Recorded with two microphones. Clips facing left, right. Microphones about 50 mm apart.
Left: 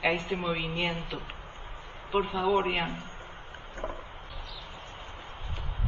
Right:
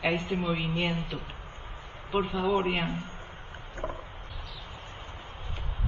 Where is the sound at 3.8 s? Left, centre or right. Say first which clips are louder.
Right 1 dB; left.